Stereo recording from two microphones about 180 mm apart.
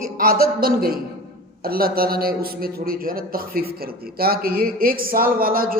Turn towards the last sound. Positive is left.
turn(degrees=-55)  # may be behind; listen again after turning